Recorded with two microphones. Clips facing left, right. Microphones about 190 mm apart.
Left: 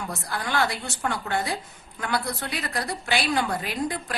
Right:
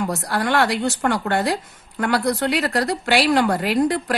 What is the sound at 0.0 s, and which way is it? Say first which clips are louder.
A woman's voice: right 9 dB; 75° right (ahead or behind).